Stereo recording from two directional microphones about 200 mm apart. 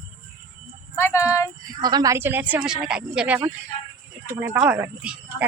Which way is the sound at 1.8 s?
20° right (ahead or behind).